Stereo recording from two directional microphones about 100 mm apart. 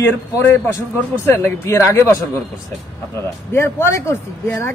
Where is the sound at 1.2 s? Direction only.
25° left (ahead or behind).